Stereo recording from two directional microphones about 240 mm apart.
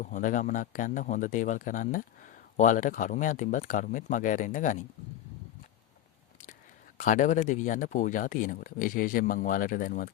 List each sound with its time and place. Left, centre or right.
0.0 s a man's voice: left
6.9 s a man's voice: left